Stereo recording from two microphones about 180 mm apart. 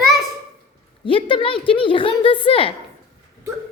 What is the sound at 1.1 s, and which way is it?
A woman's voice, 30° left (ahead or behind).